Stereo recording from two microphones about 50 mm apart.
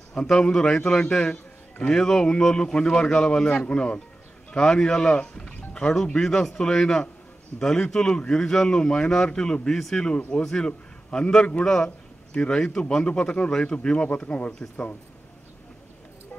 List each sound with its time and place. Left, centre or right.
0.1 s a man's voice: centre